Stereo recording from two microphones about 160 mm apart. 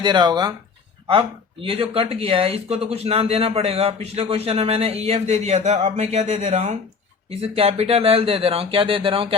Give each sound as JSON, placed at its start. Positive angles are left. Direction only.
{"t": 0.0, "sound": "speech", "side_deg": -30}
{"t": 1.6, "sound": "speech", "side_deg": -35}